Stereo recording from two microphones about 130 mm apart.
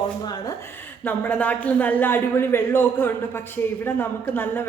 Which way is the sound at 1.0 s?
10° left (ahead or behind).